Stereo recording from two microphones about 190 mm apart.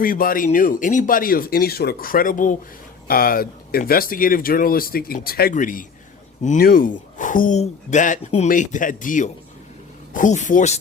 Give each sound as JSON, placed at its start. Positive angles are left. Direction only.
{"t": 0.0, "sound": "speech", "side_deg": 45}